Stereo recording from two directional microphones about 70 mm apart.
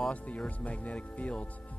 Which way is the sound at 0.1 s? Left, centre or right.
Centre.